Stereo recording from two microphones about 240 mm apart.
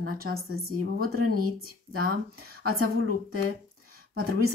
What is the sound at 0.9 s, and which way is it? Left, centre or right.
Speech, right.